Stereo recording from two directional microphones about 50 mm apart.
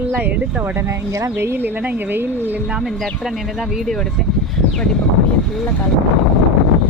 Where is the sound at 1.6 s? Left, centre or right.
Right.